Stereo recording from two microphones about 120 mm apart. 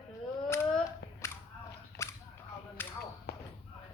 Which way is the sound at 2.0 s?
25° left (ahead or behind).